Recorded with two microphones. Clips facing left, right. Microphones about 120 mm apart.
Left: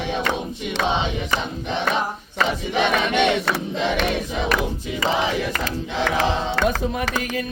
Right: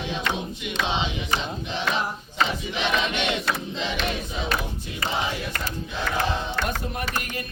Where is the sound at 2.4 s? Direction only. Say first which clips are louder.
Left 5 dB; 55° left (ahead or behind).